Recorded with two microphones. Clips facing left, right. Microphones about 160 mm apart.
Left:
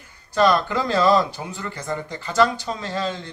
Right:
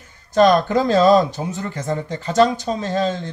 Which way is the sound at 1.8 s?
25° right (ahead or behind).